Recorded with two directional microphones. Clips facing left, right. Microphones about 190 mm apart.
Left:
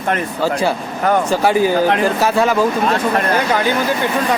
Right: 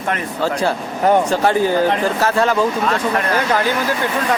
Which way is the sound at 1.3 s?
10° left (ahead or behind).